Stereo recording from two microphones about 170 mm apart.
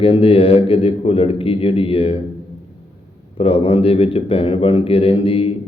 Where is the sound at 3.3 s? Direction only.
35° left (ahead or behind).